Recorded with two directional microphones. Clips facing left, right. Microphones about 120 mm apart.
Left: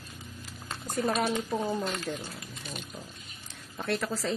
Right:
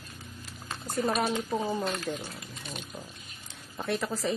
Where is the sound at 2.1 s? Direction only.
Centre (ahead or behind).